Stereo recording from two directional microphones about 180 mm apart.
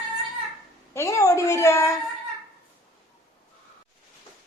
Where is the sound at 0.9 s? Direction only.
15° left (ahead or behind).